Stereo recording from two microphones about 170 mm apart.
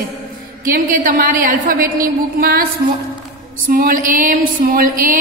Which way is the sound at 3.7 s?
60° right (ahead or behind).